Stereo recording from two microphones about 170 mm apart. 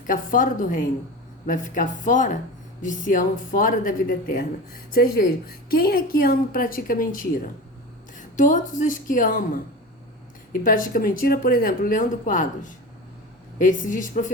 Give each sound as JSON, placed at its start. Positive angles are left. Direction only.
{"t": 0.1, "sound": "a woman's voice", "side_deg": 55}